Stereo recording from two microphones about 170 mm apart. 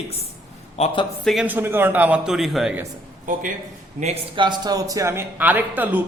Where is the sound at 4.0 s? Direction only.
35° right (ahead or behind); by 6.0 s 10° right (ahead or behind).